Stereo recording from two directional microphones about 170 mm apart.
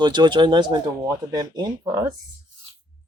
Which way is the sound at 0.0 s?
25° right (ahead or behind).